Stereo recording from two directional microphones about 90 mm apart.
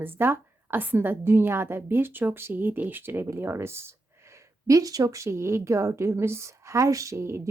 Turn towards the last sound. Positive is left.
turn(degrees=-30)  # may be behind; listen again after turning